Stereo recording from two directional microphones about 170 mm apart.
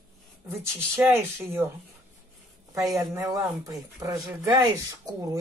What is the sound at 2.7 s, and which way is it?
Speech, 20° right (ahead or behind).